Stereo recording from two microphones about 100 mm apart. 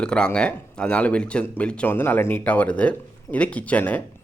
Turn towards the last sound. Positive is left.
turn(degrees=15)  # may be behind; listen again after turning